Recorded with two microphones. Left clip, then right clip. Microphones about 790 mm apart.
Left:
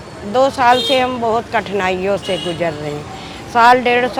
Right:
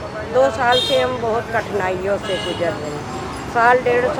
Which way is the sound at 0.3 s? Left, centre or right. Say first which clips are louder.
Left 3 dB; left.